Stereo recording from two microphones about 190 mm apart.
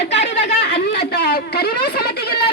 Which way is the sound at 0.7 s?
60° left (ahead or behind).